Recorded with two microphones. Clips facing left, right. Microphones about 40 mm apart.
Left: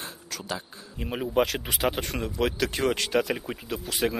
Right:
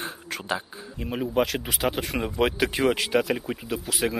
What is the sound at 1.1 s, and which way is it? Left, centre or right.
Speech, centre.